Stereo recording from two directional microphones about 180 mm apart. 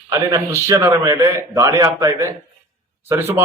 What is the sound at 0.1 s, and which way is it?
A man's voice, 20° right (ahead or behind).